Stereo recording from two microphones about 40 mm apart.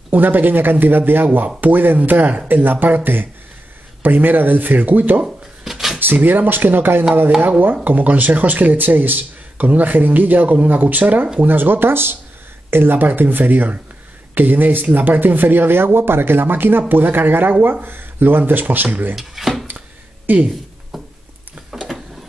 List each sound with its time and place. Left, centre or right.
0.1 s speech: right
5.2 s cash register: centre
5.9 s speech: right
7.8 s speech: right
11.4 s speech: right
19.1 s speech: centre
20.3 s speech: right
20.9 s a sound: centre